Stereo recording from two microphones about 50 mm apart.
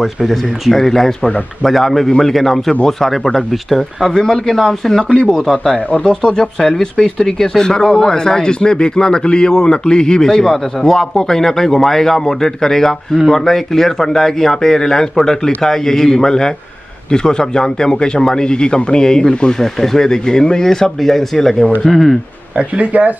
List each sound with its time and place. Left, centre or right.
0.0 s speech: centre
22.6 s speech: right